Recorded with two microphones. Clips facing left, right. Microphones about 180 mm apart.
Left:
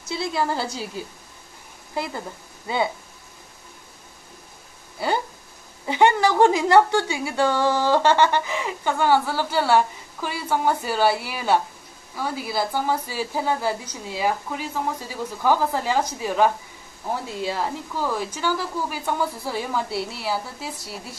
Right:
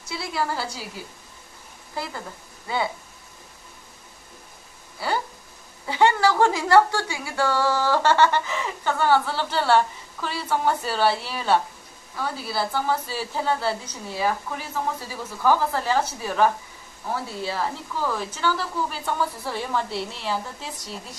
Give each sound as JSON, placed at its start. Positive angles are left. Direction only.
{"t": 0.1, "sound": "a woman's voice", "side_deg": 20}
{"t": 2.0, "sound": "a woman's voice", "side_deg": 20}
{"t": 5.0, "sound": "a woman's voice", "side_deg": 20}